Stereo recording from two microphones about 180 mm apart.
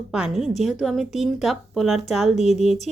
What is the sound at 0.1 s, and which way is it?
A woman's voice, centre (ahead or behind).